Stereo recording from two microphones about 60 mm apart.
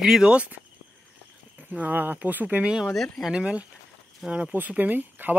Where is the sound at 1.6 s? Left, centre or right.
Right.